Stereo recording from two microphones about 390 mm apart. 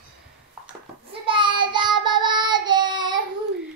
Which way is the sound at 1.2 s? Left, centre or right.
Centre.